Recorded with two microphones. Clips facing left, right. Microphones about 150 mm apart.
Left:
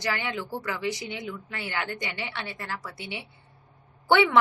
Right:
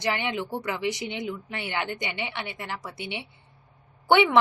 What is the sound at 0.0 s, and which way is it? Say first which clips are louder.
A woman's voice: right 3 dB; 20° right (ahead or behind).